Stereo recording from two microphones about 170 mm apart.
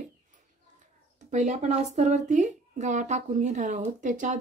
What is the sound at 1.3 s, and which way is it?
A woman's voice, 45° right (ahead or behind).